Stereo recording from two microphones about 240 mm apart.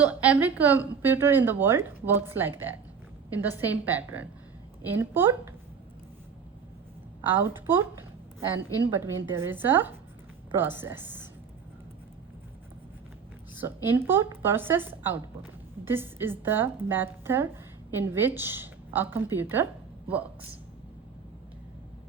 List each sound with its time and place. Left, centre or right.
0.0 s a woman's voice: centre
7.2 s a woman's voice: centre
8.9 s a woman's voice: centre
13.8 s a woman's voice: centre